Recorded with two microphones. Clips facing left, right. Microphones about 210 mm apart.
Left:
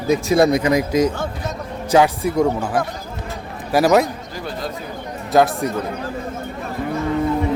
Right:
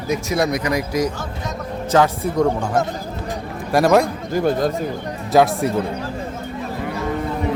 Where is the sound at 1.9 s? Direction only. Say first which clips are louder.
Left 2 dB; 10° left (ahead or behind).